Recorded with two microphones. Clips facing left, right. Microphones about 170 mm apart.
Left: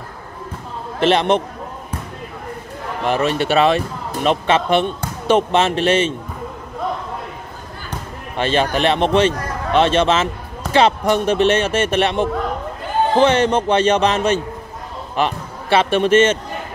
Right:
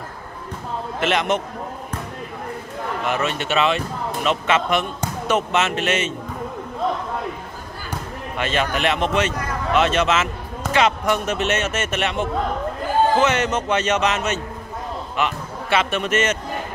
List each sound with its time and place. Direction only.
0.9 s a man's voice: 30° left (ahead or behind)
3.1 s a man's voice: 35° left (ahead or behind)
8.4 s a man's voice: 30° left (ahead or behind)